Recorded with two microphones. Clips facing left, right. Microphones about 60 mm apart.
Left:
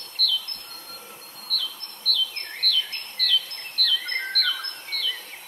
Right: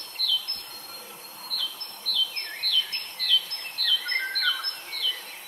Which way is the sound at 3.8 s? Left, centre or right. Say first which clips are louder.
Left 1 dB; centre.